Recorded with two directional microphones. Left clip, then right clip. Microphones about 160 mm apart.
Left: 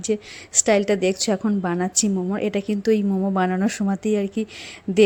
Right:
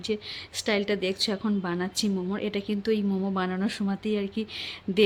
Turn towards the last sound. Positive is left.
turn(degrees=15)  # may be behind; listen again after turning